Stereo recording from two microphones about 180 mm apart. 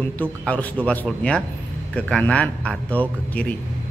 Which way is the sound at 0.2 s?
10° left (ahead or behind).